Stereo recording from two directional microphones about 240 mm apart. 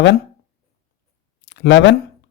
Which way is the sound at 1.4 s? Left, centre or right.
Left.